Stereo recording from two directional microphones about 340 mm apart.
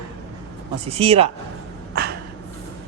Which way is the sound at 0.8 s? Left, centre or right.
Centre.